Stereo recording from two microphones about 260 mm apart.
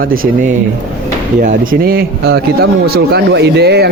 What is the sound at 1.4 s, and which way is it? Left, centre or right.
A man's voice, right.